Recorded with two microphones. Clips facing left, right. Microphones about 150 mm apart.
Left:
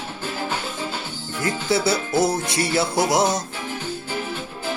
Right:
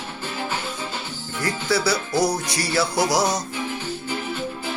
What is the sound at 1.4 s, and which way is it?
Music, 25° left (ahead or behind).